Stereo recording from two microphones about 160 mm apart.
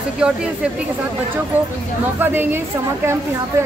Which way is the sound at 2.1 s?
15° right (ahead or behind).